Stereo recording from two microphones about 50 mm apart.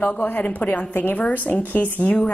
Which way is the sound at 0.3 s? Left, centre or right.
Left.